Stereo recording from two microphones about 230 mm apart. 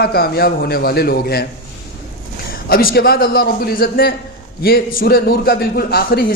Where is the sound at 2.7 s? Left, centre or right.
Left.